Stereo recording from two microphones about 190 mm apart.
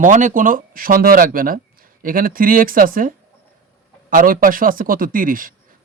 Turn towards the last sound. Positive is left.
turn(degrees=-45)  # may be behind; listen again after turning